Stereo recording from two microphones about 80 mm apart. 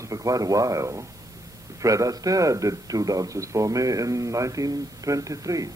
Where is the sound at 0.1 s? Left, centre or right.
Right.